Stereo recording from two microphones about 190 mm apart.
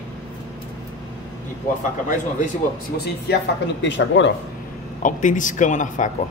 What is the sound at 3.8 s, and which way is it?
Speech, 70° left (ahead or behind).